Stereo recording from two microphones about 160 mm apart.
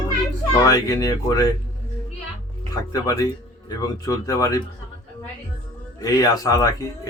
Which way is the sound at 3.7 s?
25° left (ahead or behind).